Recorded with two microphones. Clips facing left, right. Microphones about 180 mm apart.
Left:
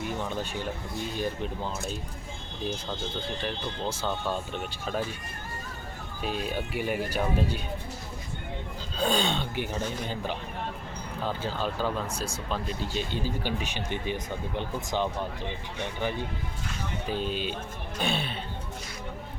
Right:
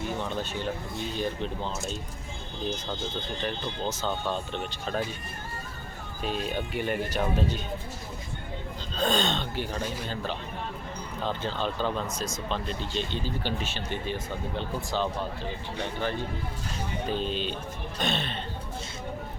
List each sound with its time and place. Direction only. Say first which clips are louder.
0.2 s speech: right 1 dB; 10° left (ahead or behind)
2.6 s speech: even; 5° left (ahead or behind)
6.2 s speech: right 1 dB; 5° left (ahead or behind)
9.0 s speech: even; 10° left (ahead or behind)
11.2 s speech: even; 5° left (ahead or behind)